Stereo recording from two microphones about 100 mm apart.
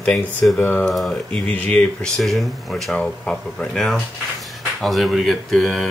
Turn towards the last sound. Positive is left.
turn(degrees=0)  # may be behind; listen again after turning